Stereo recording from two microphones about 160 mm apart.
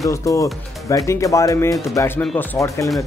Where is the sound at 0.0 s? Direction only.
20° left (ahead or behind).